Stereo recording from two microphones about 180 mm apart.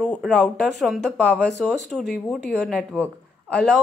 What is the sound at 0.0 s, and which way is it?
A woman's voice, centre (ahead or behind).